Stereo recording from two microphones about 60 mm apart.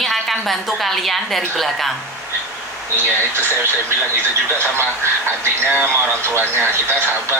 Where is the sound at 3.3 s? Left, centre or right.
Right.